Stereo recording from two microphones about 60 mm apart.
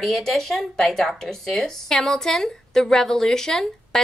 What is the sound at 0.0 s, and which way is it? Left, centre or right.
A woman's voice, centre.